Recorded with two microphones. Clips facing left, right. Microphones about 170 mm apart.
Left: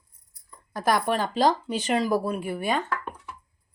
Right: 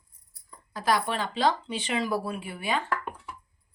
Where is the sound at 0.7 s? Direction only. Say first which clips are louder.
Left 3 dB; 50° left (ahead or behind).